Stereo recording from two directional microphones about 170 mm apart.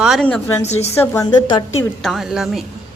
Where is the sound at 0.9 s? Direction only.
15° left (ahead or behind).